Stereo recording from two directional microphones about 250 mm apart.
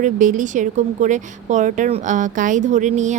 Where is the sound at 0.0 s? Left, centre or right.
Right.